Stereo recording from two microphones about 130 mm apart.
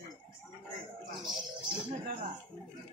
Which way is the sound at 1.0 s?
35° right (ahead or behind).